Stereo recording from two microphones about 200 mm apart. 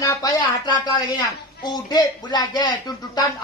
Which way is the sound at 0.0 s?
15° left (ahead or behind).